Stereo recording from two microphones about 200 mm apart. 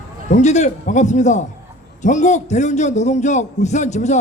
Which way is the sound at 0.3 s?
35° left (ahead or behind).